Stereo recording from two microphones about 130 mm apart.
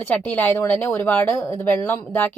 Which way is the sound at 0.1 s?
15° left (ahead or behind).